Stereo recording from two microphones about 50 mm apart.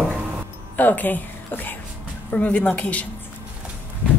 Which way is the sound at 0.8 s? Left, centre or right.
Left.